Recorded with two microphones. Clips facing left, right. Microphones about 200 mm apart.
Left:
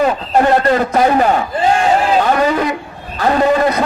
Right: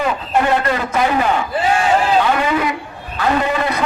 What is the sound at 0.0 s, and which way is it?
A man's voice, 40° left (ahead or behind).